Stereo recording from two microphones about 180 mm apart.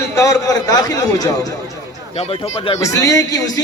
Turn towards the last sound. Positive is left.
turn(degrees=20)  # may be behind; listen again after turning